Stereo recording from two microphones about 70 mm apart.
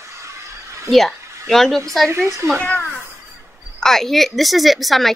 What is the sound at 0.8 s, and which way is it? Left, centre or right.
Speech, centre.